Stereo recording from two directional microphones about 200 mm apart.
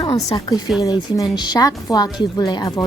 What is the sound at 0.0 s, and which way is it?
A woman's voice, 20° left (ahead or behind).